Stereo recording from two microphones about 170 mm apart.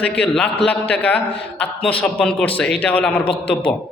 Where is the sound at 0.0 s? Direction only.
5° left (ahead or behind).